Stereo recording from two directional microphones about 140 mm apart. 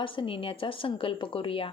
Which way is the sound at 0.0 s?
40° left (ahead or behind).